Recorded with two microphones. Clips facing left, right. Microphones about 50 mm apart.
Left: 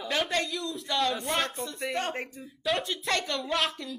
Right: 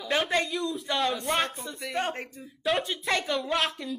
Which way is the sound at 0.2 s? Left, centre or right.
Centre.